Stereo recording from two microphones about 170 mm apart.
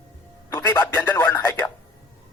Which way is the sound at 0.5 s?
20° left (ahead or behind).